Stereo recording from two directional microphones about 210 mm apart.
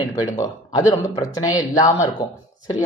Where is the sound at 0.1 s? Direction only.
20° left (ahead or behind).